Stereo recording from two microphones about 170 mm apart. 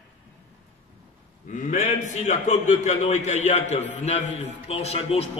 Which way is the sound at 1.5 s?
50° left (ahead or behind).